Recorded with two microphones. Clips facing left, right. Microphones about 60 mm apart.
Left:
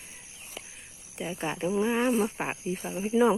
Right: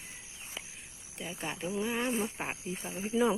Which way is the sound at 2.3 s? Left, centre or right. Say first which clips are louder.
Left 5 dB; left.